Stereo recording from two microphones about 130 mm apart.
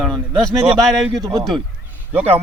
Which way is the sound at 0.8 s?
Centre (ahead or behind).